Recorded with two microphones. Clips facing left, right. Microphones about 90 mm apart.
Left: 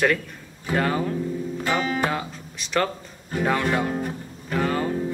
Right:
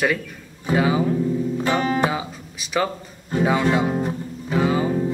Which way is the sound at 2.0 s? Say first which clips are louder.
Right 3 dB; 5° right (ahead or behind).